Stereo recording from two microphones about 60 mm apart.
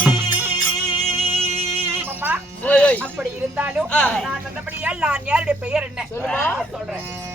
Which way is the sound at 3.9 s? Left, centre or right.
Left.